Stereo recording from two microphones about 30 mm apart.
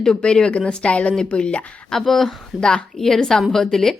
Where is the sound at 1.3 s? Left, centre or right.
Left.